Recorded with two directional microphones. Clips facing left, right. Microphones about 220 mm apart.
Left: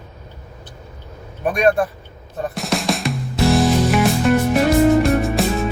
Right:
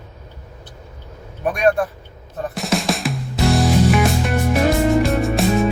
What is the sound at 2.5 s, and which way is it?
Music, centre (ahead or behind).